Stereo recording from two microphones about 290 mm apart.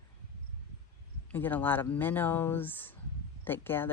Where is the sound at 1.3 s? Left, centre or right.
Centre.